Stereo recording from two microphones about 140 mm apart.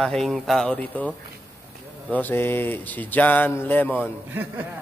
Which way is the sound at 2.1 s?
15° left (ahead or behind).